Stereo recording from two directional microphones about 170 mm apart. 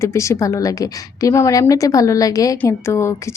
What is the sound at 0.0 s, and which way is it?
A woman's voice, 15° left (ahead or behind).